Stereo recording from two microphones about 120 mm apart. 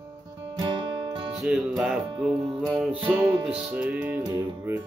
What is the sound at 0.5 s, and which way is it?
Music, 40° right (ahead or behind).